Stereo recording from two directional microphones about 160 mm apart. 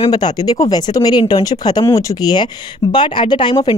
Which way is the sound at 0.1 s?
25° left (ahead or behind).